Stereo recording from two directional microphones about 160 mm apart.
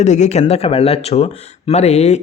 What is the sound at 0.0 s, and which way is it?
Speech, 45° left (ahead or behind).